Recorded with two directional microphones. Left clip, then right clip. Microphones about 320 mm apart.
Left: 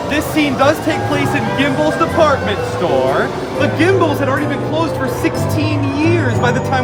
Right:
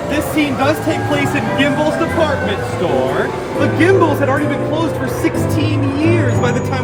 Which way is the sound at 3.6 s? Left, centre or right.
Centre.